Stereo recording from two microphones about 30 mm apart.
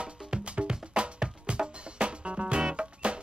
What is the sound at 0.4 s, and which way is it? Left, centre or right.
Music, right.